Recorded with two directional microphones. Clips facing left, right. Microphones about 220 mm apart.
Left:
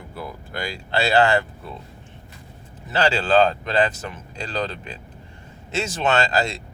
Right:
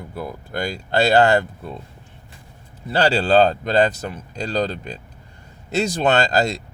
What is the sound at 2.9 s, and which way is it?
Speech, 40° right (ahead or behind).